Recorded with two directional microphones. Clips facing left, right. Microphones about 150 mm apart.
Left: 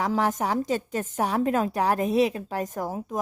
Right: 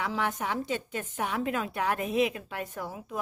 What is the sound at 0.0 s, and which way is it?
A woman's voice, 40° left (ahead or behind).